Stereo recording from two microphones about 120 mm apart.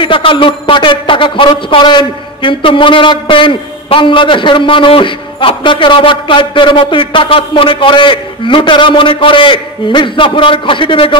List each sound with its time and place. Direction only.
0.0 s a man's voice: 45° left (ahead or behind)